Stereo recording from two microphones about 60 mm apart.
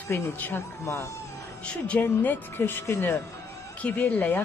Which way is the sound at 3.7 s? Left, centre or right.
Left.